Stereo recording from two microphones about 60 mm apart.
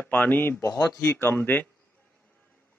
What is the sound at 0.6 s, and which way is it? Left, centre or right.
Speech, left.